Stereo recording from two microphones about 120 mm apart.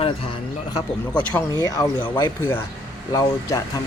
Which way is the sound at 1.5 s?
30° left (ahead or behind).